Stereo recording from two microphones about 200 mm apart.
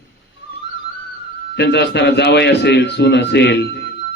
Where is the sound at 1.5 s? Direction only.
60° left (ahead or behind).